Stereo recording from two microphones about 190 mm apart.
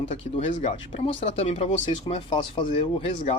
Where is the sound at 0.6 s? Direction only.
35° left (ahead or behind).